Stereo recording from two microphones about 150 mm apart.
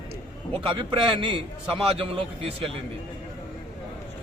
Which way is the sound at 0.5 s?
35° right (ahead or behind).